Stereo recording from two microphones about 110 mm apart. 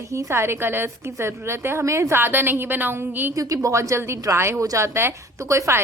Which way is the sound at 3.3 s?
30° right (ahead or behind).